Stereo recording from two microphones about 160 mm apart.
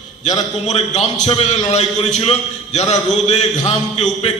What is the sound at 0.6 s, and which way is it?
A man's voice, 45° left (ahead or behind).